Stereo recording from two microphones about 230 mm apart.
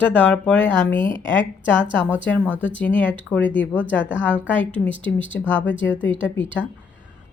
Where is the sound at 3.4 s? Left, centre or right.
Left.